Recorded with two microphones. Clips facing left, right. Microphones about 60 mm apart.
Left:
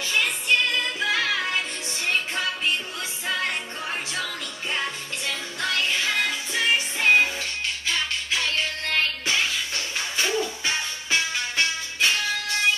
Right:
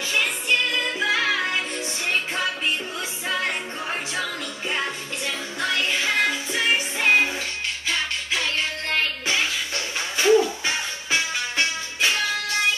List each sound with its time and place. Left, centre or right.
0.1 s music: centre
10.1 s music: centre